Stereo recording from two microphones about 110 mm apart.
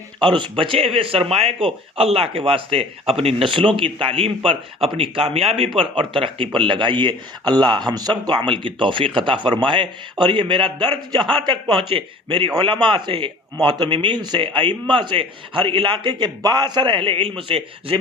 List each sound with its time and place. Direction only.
0.2 s a man's voice: 50° right (ahead or behind)